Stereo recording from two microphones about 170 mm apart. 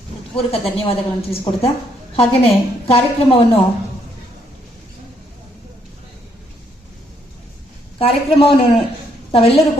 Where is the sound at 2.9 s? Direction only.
35° left (ahead or behind).